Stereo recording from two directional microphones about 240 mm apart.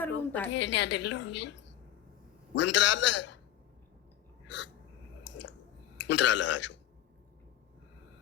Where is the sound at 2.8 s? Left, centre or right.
Left.